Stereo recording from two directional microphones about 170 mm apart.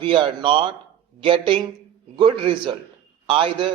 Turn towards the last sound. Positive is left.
turn(degrees=-30)  # may be behind; listen again after turning